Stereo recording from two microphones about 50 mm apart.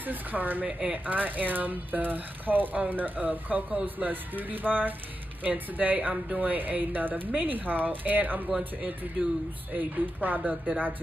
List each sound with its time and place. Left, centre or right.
0.0 s speech: right
0.7 s speech: right
1.0 s speech: right
9.8 s speech: right